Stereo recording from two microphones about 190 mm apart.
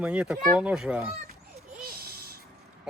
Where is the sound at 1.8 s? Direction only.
55° right (ahead or behind).